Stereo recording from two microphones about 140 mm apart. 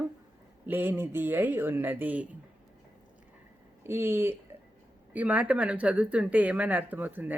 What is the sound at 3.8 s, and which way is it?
Speech, 15° right (ahead or behind).